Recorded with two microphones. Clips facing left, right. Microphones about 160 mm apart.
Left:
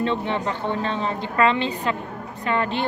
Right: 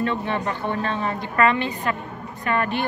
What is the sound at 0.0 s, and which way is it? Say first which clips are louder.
A woman's voice: left 1 dB; 20° left (ahead or behind).